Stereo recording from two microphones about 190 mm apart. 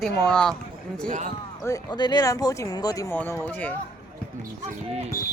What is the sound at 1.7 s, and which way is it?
Speech, 20° left (ahead or behind).